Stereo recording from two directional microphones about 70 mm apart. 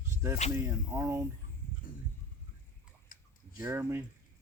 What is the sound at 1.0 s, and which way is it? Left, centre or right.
Speech, right.